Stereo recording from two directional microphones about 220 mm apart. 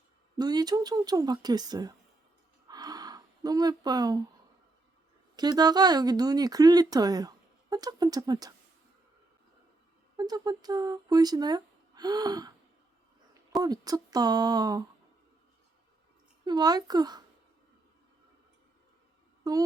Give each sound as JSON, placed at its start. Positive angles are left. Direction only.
{"t": 0.3, "sound": "speech", "side_deg": -20}
{"t": 2.6, "sound": "a sound", "side_deg": -15}
{"t": 5.4, "sound": "speech", "side_deg": -20}
{"t": 10.2, "sound": "speech", "side_deg": -20}
{"t": 13.6, "sound": "speech", "side_deg": -15}
{"t": 16.4, "sound": "speech", "side_deg": -20}
{"t": 19.4, "sound": "mantra", "side_deg": -15}